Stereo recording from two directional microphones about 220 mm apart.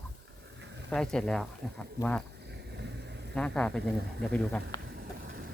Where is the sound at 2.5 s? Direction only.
50° right (ahead or behind).